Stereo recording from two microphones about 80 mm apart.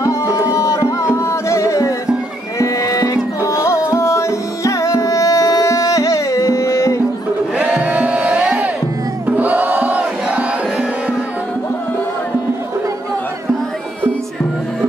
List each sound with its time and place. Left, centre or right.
0.0 s music: left
7.5 s crowd: centre
9.4 s music: centre